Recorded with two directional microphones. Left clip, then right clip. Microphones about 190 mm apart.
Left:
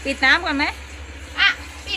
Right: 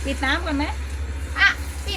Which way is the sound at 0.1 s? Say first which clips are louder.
Left 7 dB; 50° left (ahead or behind).